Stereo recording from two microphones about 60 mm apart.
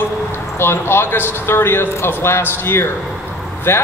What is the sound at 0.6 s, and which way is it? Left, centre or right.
A man's voice, left.